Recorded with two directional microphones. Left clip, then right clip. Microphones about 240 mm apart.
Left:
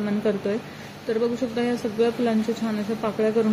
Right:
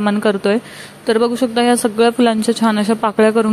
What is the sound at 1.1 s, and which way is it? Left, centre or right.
Speech, right.